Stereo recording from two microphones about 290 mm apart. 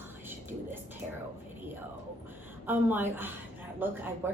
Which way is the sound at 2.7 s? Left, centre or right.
Centre.